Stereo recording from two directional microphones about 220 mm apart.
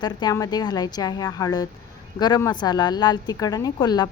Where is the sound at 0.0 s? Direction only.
20° left (ahead or behind).